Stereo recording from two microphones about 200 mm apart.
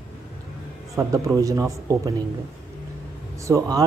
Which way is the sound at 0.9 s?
15° right (ahead or behind).